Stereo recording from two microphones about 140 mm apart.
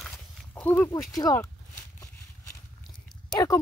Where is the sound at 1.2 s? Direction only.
25° left (ahead or behind).